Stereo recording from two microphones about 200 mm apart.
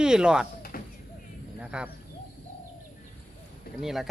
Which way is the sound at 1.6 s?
5° right (ahead or behind).